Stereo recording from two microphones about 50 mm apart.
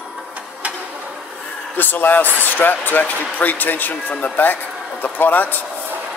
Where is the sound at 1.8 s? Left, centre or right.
Left.